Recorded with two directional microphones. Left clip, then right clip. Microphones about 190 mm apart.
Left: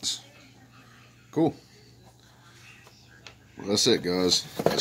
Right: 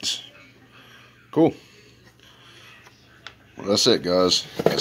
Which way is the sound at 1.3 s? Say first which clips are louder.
Right 6 dB; 5° right (ahead or behind).